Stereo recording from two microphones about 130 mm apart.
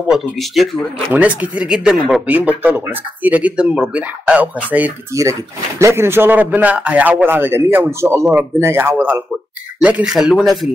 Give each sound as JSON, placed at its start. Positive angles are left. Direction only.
{"t": 0.1, "sound": "speech", "side_deg": 0}
{"t": 1.1, "sound": "a man's voice", "side_deg": -10}